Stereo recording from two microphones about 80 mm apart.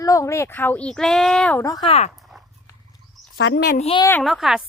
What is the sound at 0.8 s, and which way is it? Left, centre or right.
Speech, centre.